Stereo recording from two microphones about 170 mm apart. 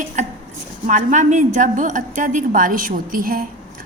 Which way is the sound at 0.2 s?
45° right (ahead or behind).